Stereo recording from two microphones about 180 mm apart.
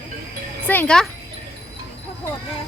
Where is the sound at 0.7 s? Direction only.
5° left (ahead or behind).